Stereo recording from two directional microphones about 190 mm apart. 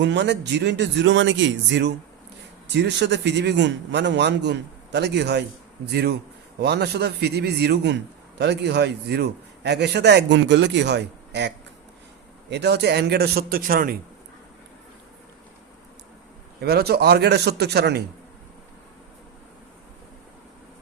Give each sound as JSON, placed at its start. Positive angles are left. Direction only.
{"t": 0.0, "sound": "a man's voice", "side_deg": -65}
{"t": 16.6, "sound": "a man's voice", "side_deg": -55}